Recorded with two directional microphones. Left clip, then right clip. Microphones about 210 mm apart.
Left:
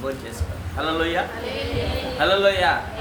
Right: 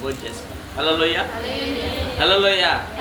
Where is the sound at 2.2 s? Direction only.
10° left (ahead or behind).